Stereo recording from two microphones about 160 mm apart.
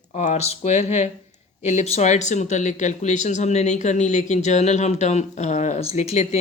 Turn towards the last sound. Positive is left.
turn(degrees=45)  # may be behind; listen again after turning